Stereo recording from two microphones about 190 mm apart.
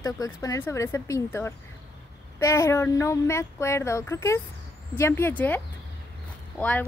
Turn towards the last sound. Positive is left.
turn(degrees=5)  # may be behind; listen again after turning